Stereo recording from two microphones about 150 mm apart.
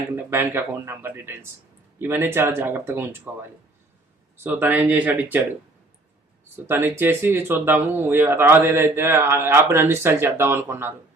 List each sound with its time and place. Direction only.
0.2 s speech: 15° right (ahead or behind)
4.4 s speech: 10° right (ahead or behind)
6.7 s speech: 15° right (ahead or behind)